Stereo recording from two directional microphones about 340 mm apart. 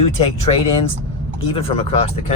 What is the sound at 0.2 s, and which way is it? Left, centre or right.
Speech, centre.